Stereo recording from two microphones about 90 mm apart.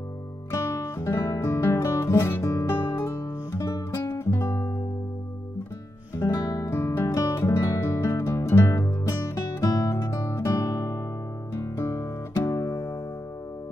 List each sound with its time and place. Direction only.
0.5 s music: 35° left (ahead or behind)
6.1 s music: 35° left (ahead or behind)
6.7 s music: 25° left (ahead or behind); by 10.1 s 45° left (ahead or behind)
10.1 s guitar: 35° left (ahead or behind)
11.5 s music: 30° left (ahead or behind)